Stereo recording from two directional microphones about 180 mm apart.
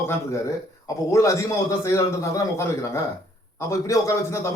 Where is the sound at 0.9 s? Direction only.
15° left (ahead or behind).